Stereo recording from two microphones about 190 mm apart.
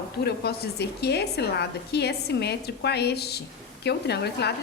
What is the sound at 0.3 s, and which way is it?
A woman's voice, 60° left (ahead or behind).